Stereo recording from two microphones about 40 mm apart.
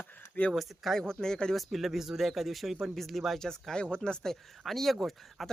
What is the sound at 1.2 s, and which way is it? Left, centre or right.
Speech, centre.